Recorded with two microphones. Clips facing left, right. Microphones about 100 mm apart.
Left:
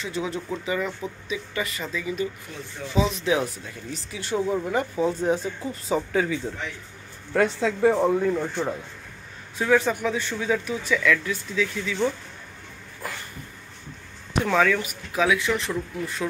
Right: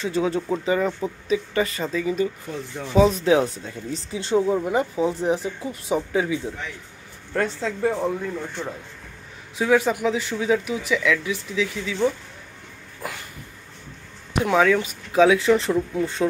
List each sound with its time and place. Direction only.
0.0 s speech: 30° right (ahead or behind)
3.3 s speech: 30° right (ahead or behind); by 6.5 s 10° right (ahead or behind)
7.3 s a woman's voice: 15° left (ahead or behind)
9.6 s speech: 15° right (ahead or behind)
14.4 s speech: 15° right (ahead or behind)